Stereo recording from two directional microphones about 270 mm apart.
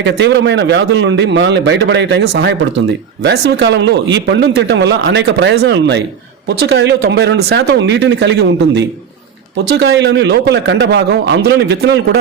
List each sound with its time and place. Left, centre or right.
0.0 s a man's voice: right